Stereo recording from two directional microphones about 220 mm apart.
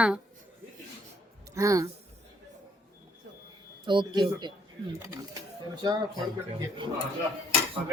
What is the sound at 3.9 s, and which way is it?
Speech, 20° right (ahead or behind).